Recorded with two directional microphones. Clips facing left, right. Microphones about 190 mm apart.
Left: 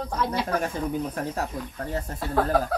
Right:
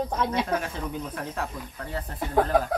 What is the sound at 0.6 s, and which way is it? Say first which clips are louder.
Speech: left 5 dB; 40° left (ahead or behind).